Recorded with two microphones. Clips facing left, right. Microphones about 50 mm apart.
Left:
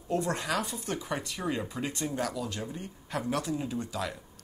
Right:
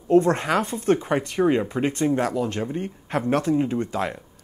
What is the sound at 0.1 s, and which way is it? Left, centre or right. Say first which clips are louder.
Speech: right 11 dB; right.